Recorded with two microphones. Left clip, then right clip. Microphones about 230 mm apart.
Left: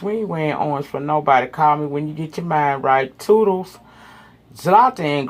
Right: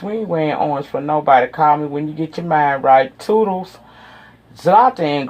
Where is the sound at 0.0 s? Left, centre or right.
Left.